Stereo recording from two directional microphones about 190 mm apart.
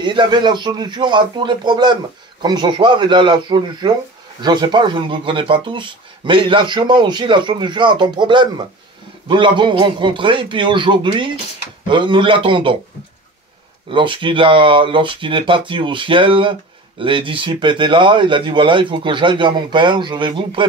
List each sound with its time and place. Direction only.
0.0 s speech: 25° right (ahead or behind)
13.8 s speech: 25° right (ahead or behind)